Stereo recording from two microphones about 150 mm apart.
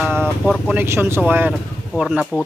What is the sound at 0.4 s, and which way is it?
Speech, centre (ahead or behind).